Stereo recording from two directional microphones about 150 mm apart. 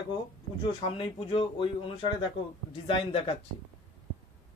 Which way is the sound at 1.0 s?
40° left (ahead or behind).